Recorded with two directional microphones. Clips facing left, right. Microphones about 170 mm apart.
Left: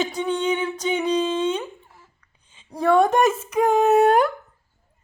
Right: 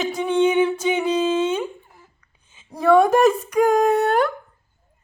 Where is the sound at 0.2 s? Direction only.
10° right (ahead or behind).